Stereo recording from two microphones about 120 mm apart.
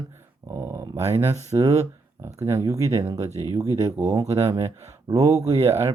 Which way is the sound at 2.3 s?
20° right (ahead or behind).